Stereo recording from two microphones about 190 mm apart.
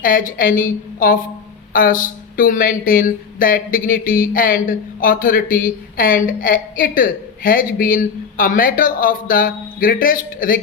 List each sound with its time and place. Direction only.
0.0 s speech: 45° left (ahead or behind)